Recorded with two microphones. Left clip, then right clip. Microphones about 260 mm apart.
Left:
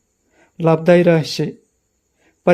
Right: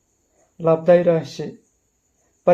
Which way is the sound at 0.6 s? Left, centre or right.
Left.